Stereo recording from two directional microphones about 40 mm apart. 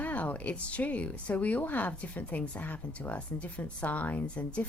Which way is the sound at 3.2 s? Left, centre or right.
Left.